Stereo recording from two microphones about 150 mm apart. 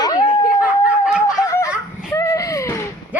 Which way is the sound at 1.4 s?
20° left (ahead or behind).